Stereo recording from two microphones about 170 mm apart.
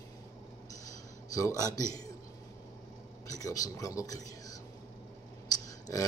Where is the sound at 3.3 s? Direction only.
20° left (ahead or behind).